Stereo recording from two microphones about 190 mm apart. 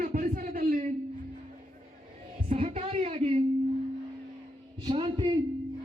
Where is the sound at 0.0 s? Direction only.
45° right (ahead or behind).